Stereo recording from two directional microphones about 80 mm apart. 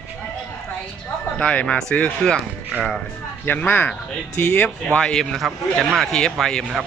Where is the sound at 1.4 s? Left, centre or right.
Centre.